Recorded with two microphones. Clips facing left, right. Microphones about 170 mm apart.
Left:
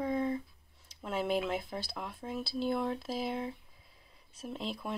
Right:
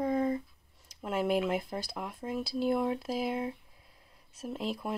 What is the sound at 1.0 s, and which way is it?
Speech, 10° right (ahead or behind).